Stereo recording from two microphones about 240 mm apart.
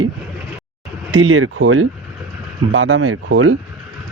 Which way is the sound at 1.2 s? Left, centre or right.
Right.